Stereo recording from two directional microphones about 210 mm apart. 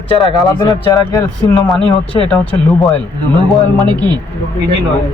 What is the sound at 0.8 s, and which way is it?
Speech, 15° left (ahead or behind).